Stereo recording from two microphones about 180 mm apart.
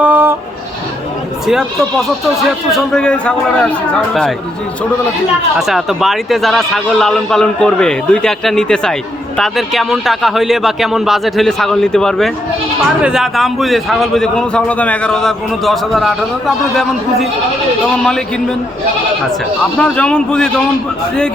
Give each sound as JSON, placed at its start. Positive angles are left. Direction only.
{"t": 0.0, "sound": "bleat", "side_deg": -10}
{"t": 1.5, "sound": "a man's voice", "side_deg": 0}
{"t": 5.5, "sound": "a man's voice", "side_deg": 0}
{"t": 19.8, "sound": "a man's voice", "side_deg": 5}